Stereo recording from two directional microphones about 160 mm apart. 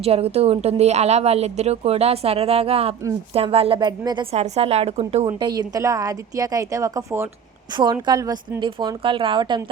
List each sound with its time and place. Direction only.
0.0 s a woman's voice: 40° right (ahead or behind)
5.2 s speech: 25° right (ahead or behind)